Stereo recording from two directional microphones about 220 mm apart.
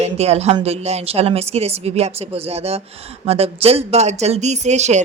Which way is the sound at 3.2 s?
25° right (ahead or behind).